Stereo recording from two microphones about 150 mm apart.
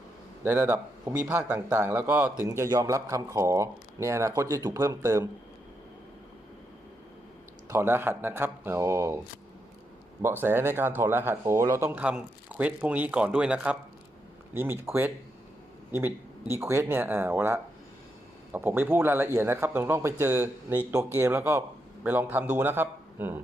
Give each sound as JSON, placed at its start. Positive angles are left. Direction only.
{"t": 0.4, "sound": "a man's voice", "side_deg": -15}
{"t": 7.7, "sound": "a man's voice", "side_deg": -15}
{"t": 10.2, "sound": "a man's voice", "side_deg": -15}